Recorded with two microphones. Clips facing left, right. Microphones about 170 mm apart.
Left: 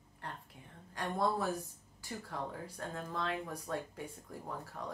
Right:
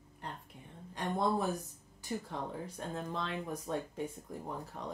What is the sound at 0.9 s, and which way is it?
Speech, 20° right (ahead or behind).